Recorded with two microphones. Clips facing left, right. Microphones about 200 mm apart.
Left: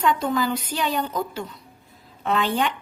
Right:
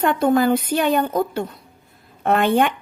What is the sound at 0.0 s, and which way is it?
A woman's voice, 55° right (ahead or behind).